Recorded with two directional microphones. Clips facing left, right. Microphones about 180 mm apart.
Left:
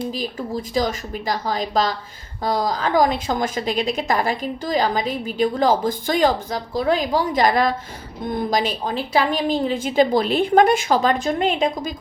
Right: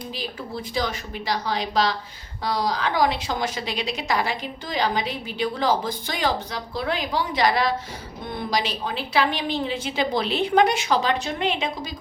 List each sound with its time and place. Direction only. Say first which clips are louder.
0.1 s a woman's voice: left 6 dB; 40° left (ahead or behind)